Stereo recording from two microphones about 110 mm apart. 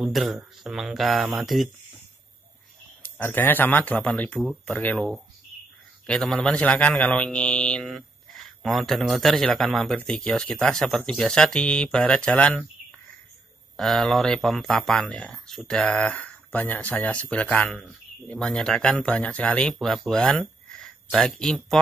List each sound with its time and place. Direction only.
0.0 s speech: centre (ahead or behind)
3.0 s speech: 20° left (ahead or behind)
4.9 s speech: centre (ahead or behind)
13.7 s speech: centre (ahead or behind)